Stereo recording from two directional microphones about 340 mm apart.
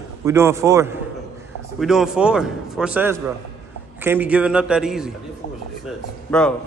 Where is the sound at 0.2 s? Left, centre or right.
Centre.